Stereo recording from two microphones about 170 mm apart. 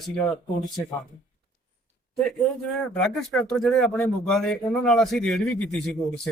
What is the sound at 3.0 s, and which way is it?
Speech, centre (ahead or behind).